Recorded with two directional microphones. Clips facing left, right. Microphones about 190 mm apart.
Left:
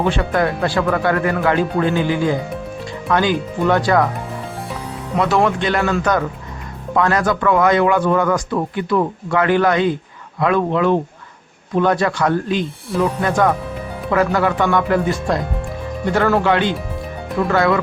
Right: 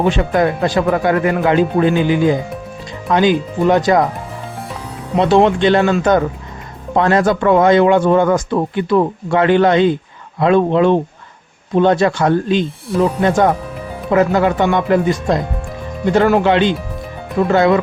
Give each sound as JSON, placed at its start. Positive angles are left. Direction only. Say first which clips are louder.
{"t": 0.0, "sound": "a man's voice", "louder": "right 3 dB", "side_deg": -20}
{"t": 5.1, "sound": "a man's voice", "louder": "right 5 dB", "side_deg": -25}